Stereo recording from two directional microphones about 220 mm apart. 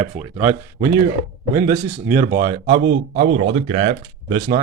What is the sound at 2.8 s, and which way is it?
Speech, 50° right (ahead or behind).